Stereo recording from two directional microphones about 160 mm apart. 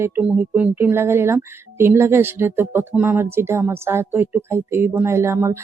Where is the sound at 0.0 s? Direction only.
10° right (ahead or behind).